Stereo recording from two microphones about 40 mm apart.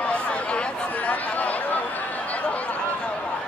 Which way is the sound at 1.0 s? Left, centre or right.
Left.